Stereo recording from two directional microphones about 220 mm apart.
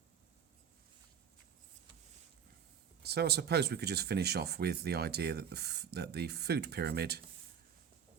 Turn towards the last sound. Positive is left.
turn(degrees=-45)  # may be behind; listen again after turning